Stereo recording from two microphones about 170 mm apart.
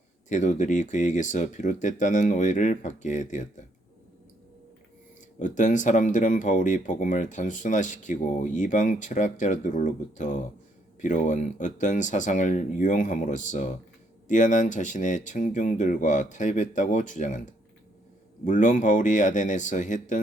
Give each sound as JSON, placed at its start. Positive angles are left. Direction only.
{"t": 0.3, "sound": "speech", "side_deg": 45}
{"t": 5.4, "sound": "speech", "side_deg": 45}